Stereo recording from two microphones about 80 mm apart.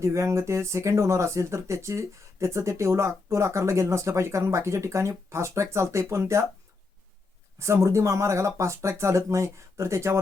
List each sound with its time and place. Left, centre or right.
0.0 s speech: right
7.6 s speech: right